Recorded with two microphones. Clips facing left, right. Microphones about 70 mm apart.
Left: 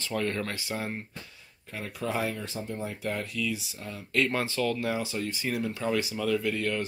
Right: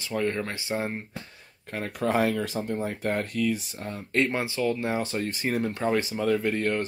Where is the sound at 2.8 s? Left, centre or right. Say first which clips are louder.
Right 5 dB; right.